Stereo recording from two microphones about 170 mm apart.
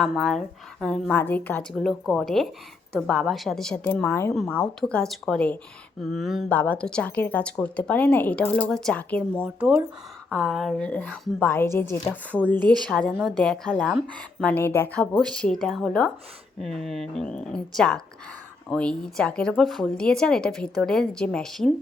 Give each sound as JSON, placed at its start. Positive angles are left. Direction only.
{"t": 0.0, "sound": "a woman's voice", "side_deg": 5}
{"t": 1.7, "sound": "a woman's voice", "side_deg": 0}
{"t": 9.6, "sound": "a woman's voice", "side_deg": -5}